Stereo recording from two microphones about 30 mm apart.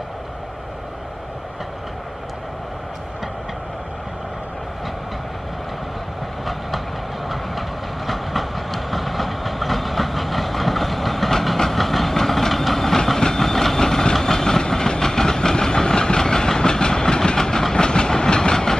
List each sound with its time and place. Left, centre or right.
8.1 s train: centre; by 18.8 s left